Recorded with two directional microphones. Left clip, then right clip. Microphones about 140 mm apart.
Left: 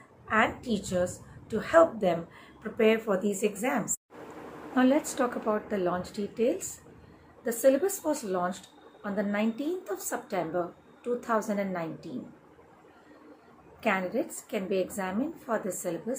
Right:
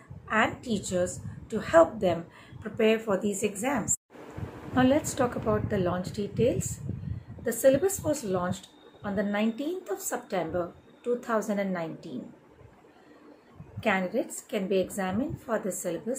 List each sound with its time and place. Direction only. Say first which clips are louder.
0.3 s a woman's voice: even; 20° right (ahead or behind)
13.7 s a woman's voice: right 1 dB; 5° right (ahead or behind)